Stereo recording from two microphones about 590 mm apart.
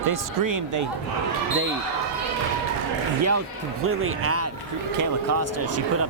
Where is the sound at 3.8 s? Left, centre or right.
Right.